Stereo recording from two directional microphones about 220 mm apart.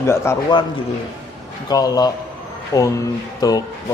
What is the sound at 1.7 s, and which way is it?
A man's voice, 15° left (ahead or behind).